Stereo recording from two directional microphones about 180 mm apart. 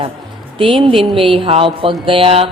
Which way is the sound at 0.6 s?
30° right (ahead or behind).